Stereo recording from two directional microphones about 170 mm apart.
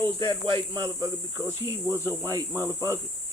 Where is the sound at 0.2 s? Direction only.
30° right (ahead or behind).